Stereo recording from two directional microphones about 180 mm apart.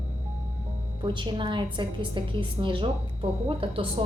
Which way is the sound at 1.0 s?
25° right (ahead or behind).